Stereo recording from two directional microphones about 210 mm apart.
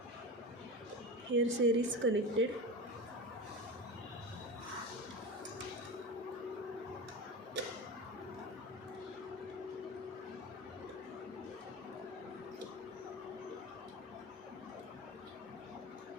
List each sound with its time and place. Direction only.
1.3 s a woman's voice: 65° right (ahead or behind)